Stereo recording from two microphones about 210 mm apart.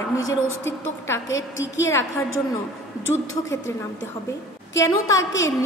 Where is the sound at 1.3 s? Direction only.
65° left (ahead or behind).